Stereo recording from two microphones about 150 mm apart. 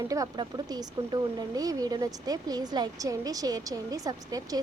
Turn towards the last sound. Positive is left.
turn(degrees=-25)  # may be behind; listen again after turning